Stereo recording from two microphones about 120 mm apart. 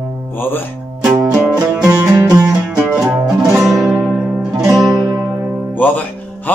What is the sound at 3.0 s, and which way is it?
Music, 10° right (ahead or behind).